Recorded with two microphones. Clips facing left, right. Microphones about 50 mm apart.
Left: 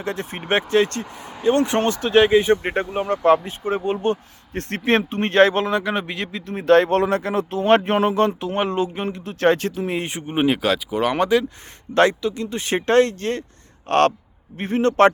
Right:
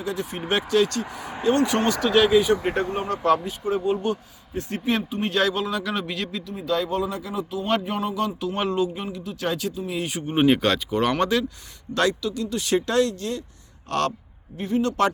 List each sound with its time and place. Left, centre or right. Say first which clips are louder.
0.0 s speech: left 1 dB; left
1.2 s speech: right 3 dB; right
1.5 s speech: left 2 dB; left
4.5 s speech: left 5 dB; left
5.8 s a man's voice: left 3 dB; left
6.4 s a man's voice: left 12 dB; left
8.4 s speech: left 2 dB; left
9.9 s speech: left 2 dB; left
10.2 s speech: even; centre
11.9 s a man's voice: left 5 dB; left